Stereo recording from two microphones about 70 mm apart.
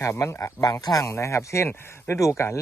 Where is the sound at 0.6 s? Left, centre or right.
Left.